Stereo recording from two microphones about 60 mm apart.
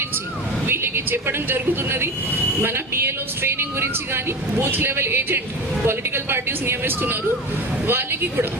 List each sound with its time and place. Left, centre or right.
0.7 s speech: right